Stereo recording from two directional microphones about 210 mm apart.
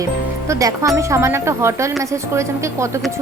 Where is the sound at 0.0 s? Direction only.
15° right (ahead or behind).